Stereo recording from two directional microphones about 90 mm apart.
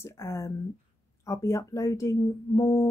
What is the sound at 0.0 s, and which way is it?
Speech, 30° left (ahead or behind).